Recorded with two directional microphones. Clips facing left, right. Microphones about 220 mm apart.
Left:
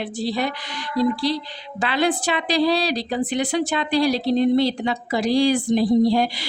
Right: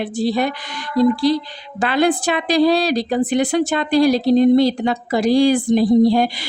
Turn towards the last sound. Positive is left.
turn(degrees=-50)  # may be behind; listen again after turning